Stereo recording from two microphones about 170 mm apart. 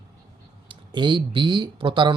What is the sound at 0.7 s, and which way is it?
Speech, 25° right (ahead or behind).